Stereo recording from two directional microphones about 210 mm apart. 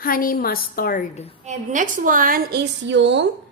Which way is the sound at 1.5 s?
35° right (ahead or behind).